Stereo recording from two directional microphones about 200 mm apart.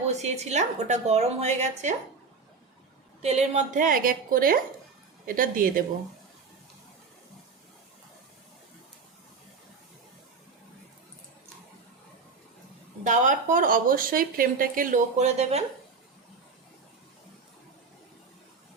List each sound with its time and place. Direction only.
0.2 s a woman's voice: 35° right (ahead or behind)
3.2 s speech: 30° right (ahead or behind)
13.1 s speech: 40° right (ahead or behind)